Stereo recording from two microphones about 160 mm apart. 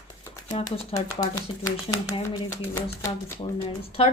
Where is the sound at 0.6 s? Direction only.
25° left (ahead or behind).